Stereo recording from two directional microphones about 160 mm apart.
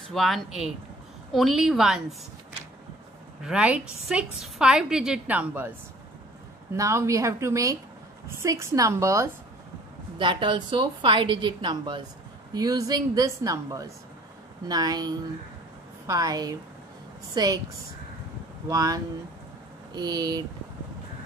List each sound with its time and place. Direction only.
0.1 s a woman's voice: centre (ahead or behind)
3.4 s a woman's voice: 5° right (ahead or behind)
6.7 s a woman's voice: 15° right (ahead or behind)
10.1 s a woman's voice: 30° right (ahead or behind)
18.7 s speech: 20° right (ahead or behind)